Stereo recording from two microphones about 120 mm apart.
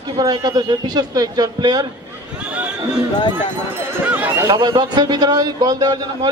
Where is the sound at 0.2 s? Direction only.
35° right (ahead or behind).